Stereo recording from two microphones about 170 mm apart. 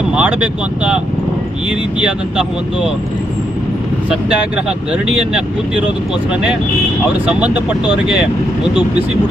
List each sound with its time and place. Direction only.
0.1 s speech: 10° right (ahead or behind)
4.1 s speech: 5° right (ahead or behind)
7.3 s speech: 5° right (ahead or behind)